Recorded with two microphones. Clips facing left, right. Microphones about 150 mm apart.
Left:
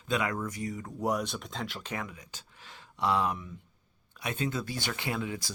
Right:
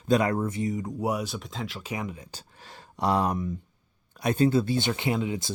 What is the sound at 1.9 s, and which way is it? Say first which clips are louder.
Speech: right 7 dB; 15° right (ahead or behind).